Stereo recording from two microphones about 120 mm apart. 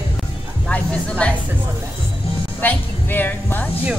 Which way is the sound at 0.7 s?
10° left (ahead or behind).